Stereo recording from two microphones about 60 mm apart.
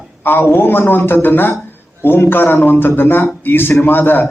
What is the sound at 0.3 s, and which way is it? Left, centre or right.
A man's voice, left.